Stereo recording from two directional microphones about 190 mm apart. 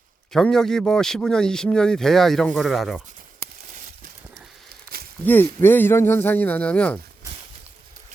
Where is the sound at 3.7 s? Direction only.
40° right (ahead or behind).